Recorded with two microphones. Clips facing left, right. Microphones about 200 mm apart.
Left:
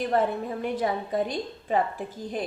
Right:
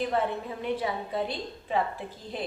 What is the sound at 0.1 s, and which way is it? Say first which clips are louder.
A woman's voice: left 4 dB; 45° left (ahead or behind).